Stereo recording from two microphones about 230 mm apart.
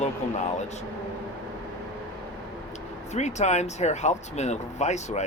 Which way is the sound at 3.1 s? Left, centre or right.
Left.